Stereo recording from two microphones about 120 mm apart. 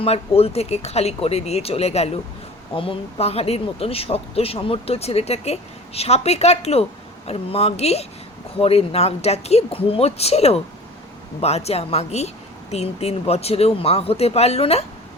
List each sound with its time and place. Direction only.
0.0 s speech: 55° left (ahead or behind)
2.7 s speech: 50° left (ahead or behind)